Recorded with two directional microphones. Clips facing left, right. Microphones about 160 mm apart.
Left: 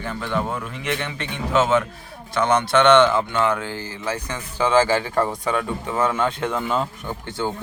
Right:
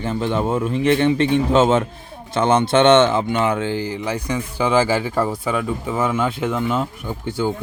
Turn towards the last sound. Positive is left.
turn(degrees=-10)  # may be behind; listen again after turning